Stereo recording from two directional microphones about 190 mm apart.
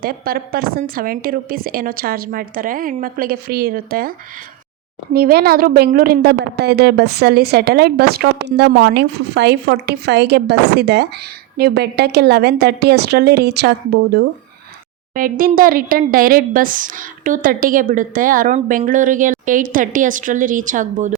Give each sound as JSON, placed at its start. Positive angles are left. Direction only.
{"t": 0.0, "sound": "speech", "side_deg": -50}
{"t": 5.1, "sound": "a woman's voice", "side_deg": -55}
{"t": 15.1, "sound": "speech", "side_deg": -45}